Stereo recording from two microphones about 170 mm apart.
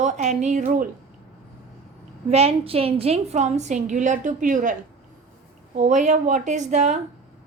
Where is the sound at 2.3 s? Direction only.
35° right (ahead or behind).